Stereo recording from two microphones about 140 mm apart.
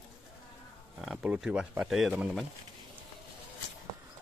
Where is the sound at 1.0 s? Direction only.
5° right (ahead or behind).